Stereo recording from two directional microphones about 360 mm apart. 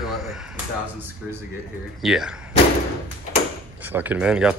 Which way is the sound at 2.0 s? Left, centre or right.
Centre.